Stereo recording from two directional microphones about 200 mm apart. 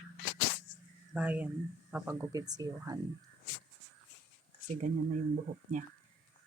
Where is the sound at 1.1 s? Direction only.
5° right (ahead or behind).